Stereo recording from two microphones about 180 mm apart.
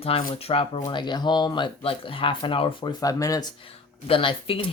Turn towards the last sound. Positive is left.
turn(degrees=30)  # may be behind; listen again after turning